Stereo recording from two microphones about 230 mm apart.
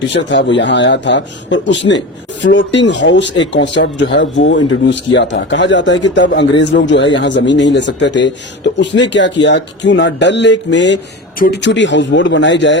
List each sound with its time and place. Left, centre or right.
0.1 s speech: left